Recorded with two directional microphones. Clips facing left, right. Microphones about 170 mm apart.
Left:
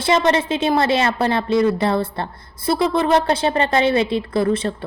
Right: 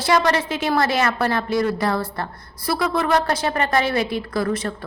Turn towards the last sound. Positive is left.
turn(degrees=25)  # may be behind; listen again after turning